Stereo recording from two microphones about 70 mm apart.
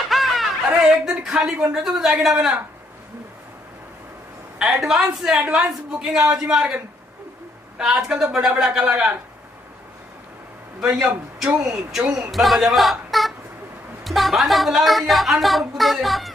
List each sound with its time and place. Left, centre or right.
0.1 s a sound: centre
1.6 s a man's voice: centre
4.6 s a man's voice: centre
10.8 s a man's voice: centre
12.3 s speech: centre